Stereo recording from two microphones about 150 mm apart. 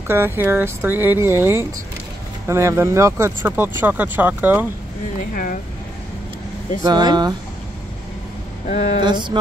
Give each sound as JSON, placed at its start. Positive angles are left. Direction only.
{"t": 0.1, "sound": "speech", "side_deg": -15}
{"t": 5.3, "sound": "speech", "side_deg": 65}
{"t": 6.8, "sound": "speech", "side_deg": -30}
{"t": 8.6, "sound": "speech", "side_deg": 50}
{"t": 9.0, "sound": "mantra", "side_deg": -30}